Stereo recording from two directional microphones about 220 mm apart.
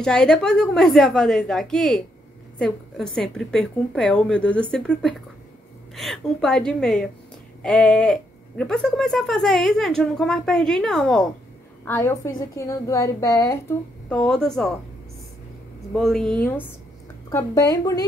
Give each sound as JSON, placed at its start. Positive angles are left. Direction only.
{"t": 0.0, "sound": "speech", "side_deg": 5}
{"t": 15.9, "sound": "speech", "side_deg": 0}